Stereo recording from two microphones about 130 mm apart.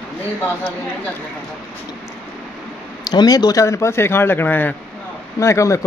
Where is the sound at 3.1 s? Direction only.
35° left (ahead or behind).